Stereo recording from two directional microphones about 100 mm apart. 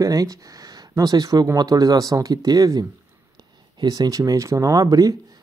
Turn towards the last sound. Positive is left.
turn(degrees=-35)  # may be behind; listen again after turning